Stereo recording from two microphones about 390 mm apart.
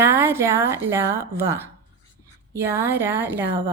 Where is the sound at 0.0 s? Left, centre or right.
Centre.